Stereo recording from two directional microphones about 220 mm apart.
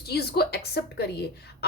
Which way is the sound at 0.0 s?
45° left (ahead or behind).